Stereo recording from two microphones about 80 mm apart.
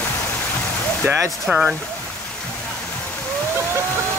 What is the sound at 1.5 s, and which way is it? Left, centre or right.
Speech, centre.